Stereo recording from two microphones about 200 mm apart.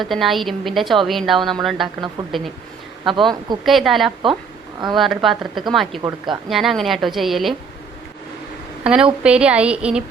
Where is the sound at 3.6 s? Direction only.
Centre (ahead or behind).